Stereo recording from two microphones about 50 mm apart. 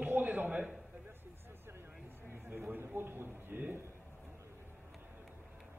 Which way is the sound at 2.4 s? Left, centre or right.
Right.